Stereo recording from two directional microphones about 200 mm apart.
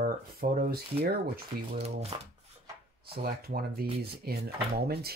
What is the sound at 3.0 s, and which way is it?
Speech, 50° right (ahead or behind).